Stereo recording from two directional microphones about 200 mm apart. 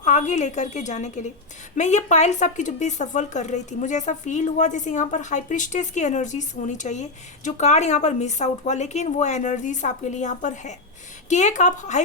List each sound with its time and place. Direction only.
0.0 s speech: 35° left (ahead or behind)